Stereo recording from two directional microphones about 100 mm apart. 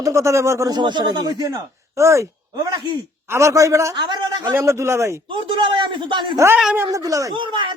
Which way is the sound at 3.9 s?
50° right (ahead or behind).